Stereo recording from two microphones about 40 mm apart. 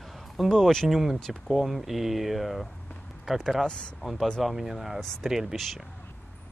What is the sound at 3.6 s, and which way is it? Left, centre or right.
Speech, left.